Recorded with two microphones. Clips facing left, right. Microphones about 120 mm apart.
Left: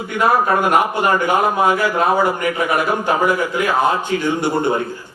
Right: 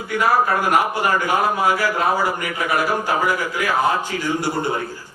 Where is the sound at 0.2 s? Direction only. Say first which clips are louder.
Left 3 dB; 25° left (ahead or behind).